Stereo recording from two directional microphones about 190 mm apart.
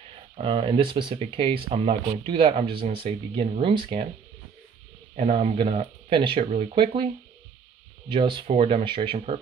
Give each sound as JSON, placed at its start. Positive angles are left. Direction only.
{"t": 0.4, "sound": "speech", "side_deg": -25}
{"t": 5.1, "sound": "speech", "side_deg": -35}
{"t": 8.1, "sound": "speech", "side_deg": -25}